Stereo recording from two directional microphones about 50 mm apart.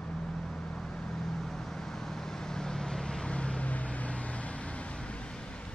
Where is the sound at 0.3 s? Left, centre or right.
Centre.